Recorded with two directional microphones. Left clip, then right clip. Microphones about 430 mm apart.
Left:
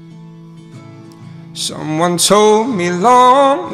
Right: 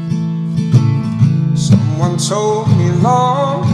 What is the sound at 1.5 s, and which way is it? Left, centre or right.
Music, left.